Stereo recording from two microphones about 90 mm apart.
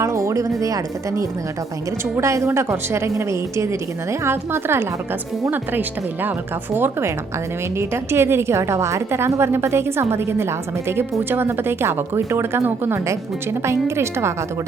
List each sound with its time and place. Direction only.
0.0 s a woman's voice: 35° right (ahead or behind)
6.7 s a woman's voice: 25° right (ahead or behind)